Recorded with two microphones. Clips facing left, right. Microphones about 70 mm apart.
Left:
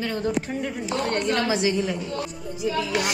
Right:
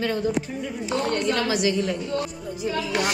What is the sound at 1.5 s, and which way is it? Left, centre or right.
Speech, left.